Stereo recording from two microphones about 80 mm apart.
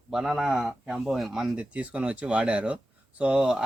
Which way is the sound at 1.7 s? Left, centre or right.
Centre.